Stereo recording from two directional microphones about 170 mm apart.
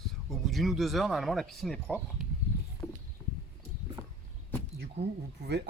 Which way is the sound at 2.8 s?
15° left (ahead or behind).